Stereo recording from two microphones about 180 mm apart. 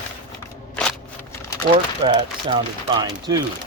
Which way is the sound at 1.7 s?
30° right (ahead or behind).